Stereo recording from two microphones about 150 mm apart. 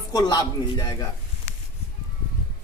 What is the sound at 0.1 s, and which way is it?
Speech, 25° left (ahead or behind).